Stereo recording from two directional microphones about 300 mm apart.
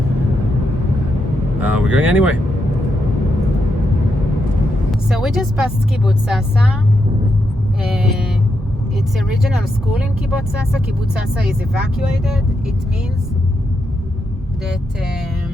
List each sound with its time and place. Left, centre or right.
1.5 s speech: centre
4.9 s speech: centre
9.1 s speech: centre
11.1 s speech: centre